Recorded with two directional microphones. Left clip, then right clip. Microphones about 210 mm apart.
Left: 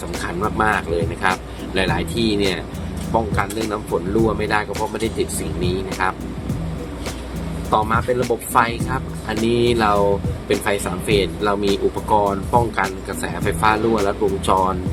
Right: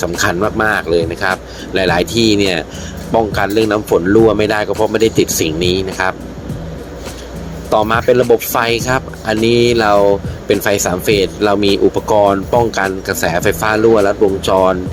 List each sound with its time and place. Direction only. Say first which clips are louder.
0.2 s speech: right 5 dB; 30° right (ahead or behind)
7.7 s speech: right 7 dB; 30° right (ahead or behind)